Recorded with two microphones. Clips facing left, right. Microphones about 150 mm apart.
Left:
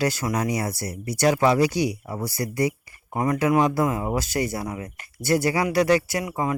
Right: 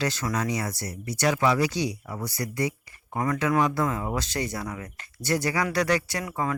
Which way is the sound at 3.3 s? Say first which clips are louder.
Left 4 dB; 20° left (ahead or behind).